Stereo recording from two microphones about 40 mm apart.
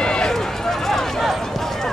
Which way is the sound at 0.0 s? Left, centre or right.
Left.